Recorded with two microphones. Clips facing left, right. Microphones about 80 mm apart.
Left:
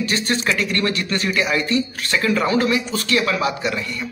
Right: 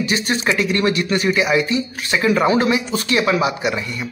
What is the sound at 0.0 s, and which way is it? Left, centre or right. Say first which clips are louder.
Speech: right 2 dB; centre.